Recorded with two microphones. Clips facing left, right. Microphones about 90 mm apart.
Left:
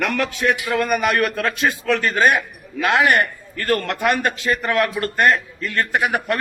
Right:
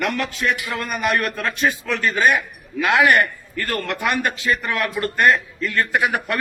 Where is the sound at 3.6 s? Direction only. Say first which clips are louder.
Left 5 dB; 35° left (ahead or behind).